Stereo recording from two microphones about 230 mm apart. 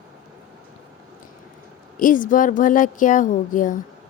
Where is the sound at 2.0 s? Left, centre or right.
Left.